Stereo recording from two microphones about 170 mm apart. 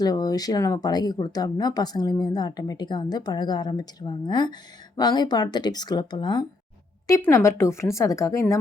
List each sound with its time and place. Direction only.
0.0 s speech: 20° left (ahead or behind)